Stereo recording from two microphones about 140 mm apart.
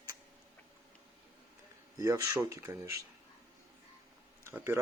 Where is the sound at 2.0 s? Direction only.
20° right (ahead or behind).